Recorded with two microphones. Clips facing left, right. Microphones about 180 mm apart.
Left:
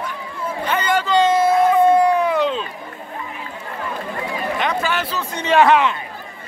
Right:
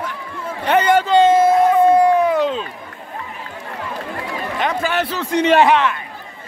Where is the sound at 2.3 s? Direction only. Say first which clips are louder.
Right 1 dB; 40° right (ahead or behind).